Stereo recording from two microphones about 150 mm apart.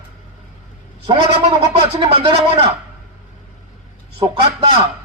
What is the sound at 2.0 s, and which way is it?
Speech, 35° right (ahead or behind).